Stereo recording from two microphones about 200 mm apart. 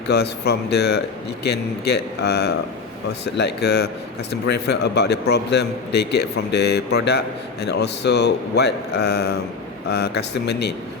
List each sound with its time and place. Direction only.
0.1 s a man's voice: 55° left (ahead or behind)